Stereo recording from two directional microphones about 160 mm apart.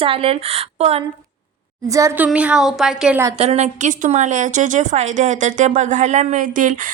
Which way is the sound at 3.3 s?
40° right (ahead or behind).